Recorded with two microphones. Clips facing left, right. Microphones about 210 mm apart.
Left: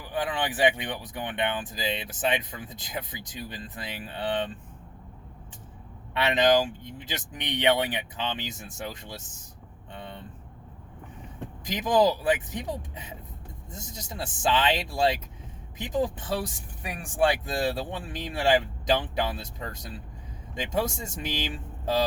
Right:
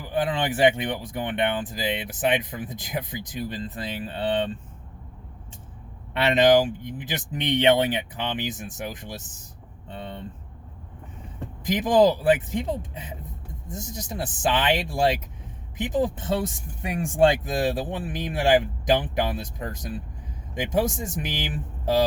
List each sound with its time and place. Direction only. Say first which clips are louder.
0.0 s speech: right 4 dB; 20° right (ahead or behind)
6.3 s speech: right 4 dB; 20° right (ahead or behind)
10.0 s vehicle: right 5 dB; 25° right (ahead or behind)
11.6 s speech: right 4 dB; 20° right (ahead or behind)